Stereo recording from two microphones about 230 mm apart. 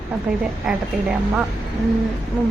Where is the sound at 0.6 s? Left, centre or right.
Centre.